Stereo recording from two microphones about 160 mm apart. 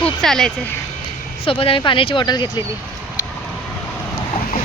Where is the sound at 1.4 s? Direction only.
35° left (ahead or behind).